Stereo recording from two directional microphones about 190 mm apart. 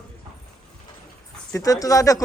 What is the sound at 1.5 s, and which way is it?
Speech, 20° left (ahead or behind).